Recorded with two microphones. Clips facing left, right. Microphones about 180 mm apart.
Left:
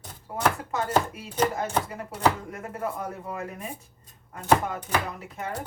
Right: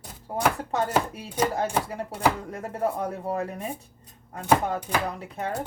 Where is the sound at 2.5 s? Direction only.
35° right (ahead or behind).